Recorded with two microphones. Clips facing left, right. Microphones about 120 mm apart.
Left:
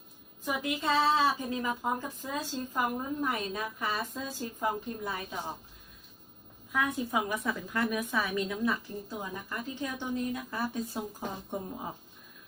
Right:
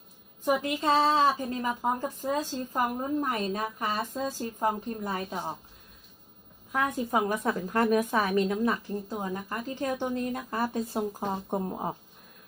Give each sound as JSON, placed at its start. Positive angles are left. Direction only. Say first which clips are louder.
{"t": 0.4, "sound": "a woman's voice", "louder": "right 5 dB", "side_deg": -40}
{"t": 6.7, "sound": "speech", "louder": "right 3 dB", "side_deg": -40}